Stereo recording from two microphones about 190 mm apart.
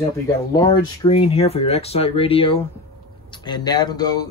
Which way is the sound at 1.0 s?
30° left (ahead or behind).